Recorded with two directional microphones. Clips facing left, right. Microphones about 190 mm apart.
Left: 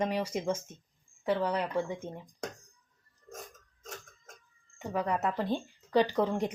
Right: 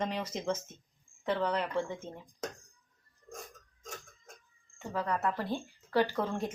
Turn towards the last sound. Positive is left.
turn(degrees=20)  # may be behind; listen again after turning